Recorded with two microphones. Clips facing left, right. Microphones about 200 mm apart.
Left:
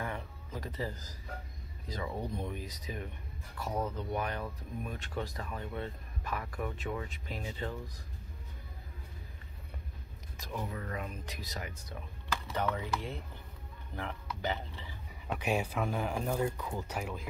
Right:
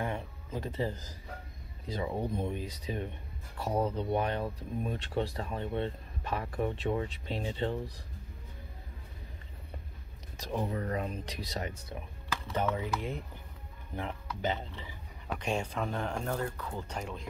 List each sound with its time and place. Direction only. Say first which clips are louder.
0.0 s a sound: right 4 dB; 25° right (ahead or behind)
2.0 s speech: right 4 dB; 20° right (ahead or behind)
10.4 s speech: right 6 dB; 35° right (ahead or behind)
12.7 s speech: right 3 dB; 20° right (ahead or behind)
15.3 s speech: left 1 dB; 5° left (ahead or behind)